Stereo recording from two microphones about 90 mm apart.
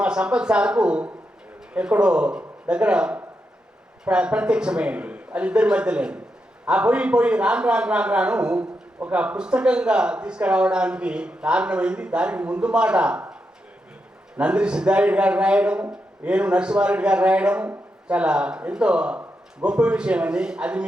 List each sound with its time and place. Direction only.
0.0 s a man's voice: 10° right (ahead or behind)
14.3 s a man's voice: 10° right (ahead or behind)